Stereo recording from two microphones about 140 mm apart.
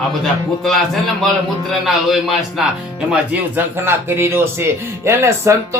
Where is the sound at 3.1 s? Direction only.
10° right (ahead or behind).